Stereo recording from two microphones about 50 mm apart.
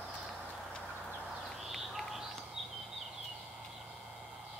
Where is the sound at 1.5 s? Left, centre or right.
Centre.